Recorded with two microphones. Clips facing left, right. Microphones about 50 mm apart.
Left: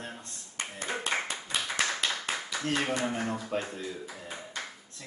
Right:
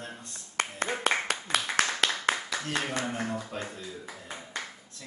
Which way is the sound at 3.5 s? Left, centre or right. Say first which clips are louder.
Left 4 dB; left.